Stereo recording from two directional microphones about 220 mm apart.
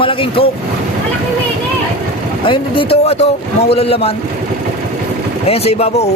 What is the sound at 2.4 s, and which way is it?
A man's voice, 25° left (ahead or behind).